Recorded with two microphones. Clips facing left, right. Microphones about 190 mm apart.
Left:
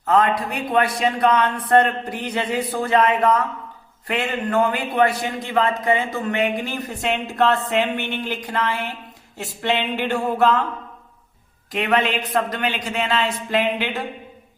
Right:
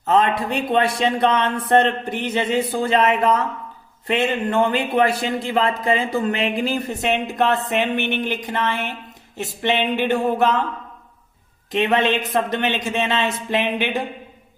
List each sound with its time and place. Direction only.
0.0 s speech: 25° right (ahead or behind)
7.0 s speech: 20° right (ahead or behind)
11.7 s speech: 25° right (ahead or behind)